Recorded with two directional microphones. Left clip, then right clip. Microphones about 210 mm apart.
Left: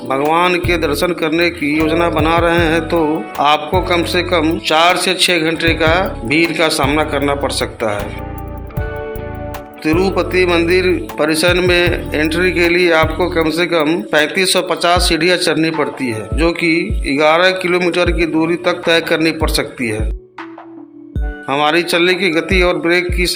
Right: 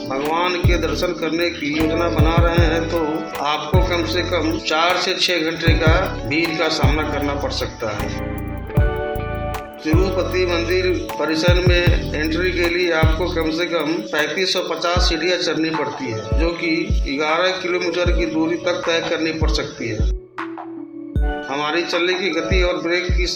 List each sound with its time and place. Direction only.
0.3 s speech: 45° left (ahead or behind)
9.8 s speech: 50° left (ahead or behind)
21.5 s speech: 50° left (ahead or behind)